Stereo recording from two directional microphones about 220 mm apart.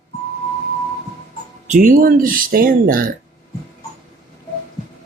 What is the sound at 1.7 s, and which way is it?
Speech, 35° right (ahead or behind).